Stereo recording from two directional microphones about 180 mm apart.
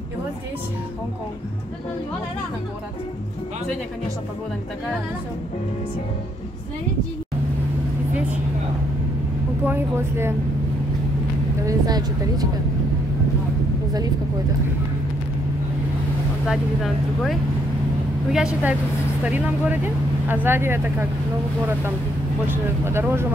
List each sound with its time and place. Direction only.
9.7 s speech: 15° right (ahead or behind)
11.6 s speech: 20° right (ahead or behind)
16.4 s speech: centre (ahead or behind)
22.5 s speech: 10° right (ahead or behind)